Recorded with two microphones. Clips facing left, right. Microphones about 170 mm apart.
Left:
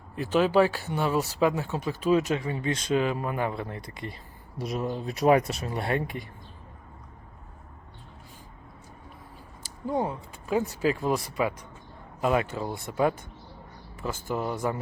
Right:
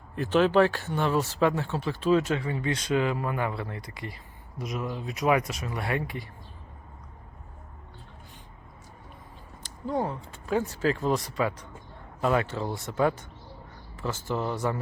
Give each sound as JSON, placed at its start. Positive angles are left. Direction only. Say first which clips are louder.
{"t": 0.3, "sound": "speech", "louder": "even", "side_deg": 10}
{"t": 9.6, "sound": "speech", "louder": "left 1 dB", "side_deg": 15}